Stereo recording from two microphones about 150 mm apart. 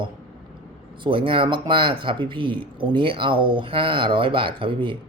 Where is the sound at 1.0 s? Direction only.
35° right (ahead or behind).